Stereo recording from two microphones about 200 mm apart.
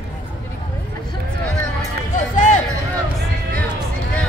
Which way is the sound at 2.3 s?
40° left (ahead or behind).